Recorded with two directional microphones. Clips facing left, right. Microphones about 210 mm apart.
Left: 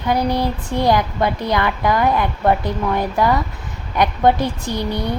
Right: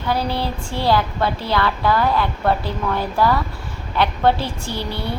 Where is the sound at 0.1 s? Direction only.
15° left (ahead or behind).